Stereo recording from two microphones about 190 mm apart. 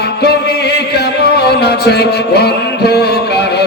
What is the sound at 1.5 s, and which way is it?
Music, 60° left (ahead or behind).